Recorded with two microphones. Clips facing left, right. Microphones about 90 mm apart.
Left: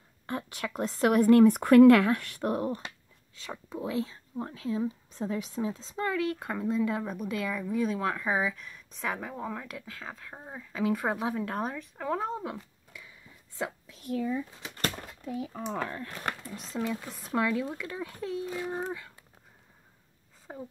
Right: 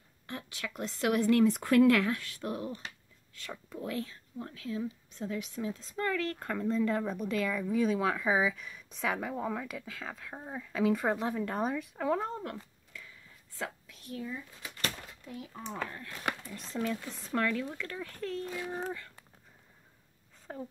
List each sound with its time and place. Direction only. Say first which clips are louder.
0.3 s a woman's voice: left 6 dB; 40° left (ahead or behind)
3.3 s speech: left 4 dB; 20° left (ahead or behind); by 12.2 s centre (ahead or behind)
12.2 s a sound: left 3 dB; 10° left (ahead or behind)
14.8 s a sound: left 4 dB; 40° left (ahead or behind)
16.4 s speech: left 1 dB; 15° left (ahead or behind)
20.5 s speech: even; 10° left (ahead or behind)